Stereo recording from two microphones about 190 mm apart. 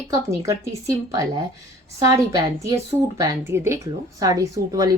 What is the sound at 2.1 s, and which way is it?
A woman's voice, 15° right (ahead or behind).